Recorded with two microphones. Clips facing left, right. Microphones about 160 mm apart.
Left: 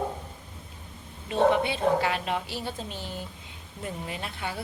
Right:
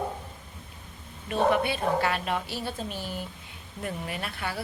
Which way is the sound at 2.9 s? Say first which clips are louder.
Right 2 dB; 10° right (ahead or behind).